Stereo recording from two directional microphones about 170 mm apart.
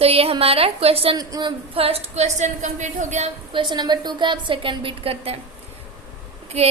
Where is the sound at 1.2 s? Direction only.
25° right (ahead or behind).